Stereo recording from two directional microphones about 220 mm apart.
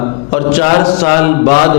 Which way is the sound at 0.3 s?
20° left (ahead or behind).